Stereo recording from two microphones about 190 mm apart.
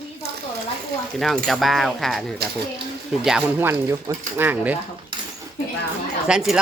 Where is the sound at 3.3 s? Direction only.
10° right (ahead or behind).